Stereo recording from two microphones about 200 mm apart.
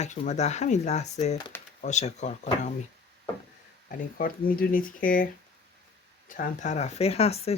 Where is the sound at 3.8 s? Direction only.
45° left (ahead or behind).